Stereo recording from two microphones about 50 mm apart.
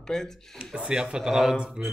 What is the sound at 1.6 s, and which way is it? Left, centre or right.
Mantra, right.